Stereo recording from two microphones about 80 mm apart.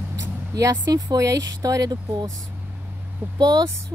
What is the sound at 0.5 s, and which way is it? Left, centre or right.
Speech, right.